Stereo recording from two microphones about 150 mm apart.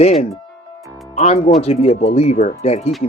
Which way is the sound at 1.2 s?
45° left (ahead or behind).